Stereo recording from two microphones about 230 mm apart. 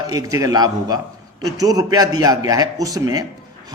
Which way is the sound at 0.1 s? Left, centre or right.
Centre.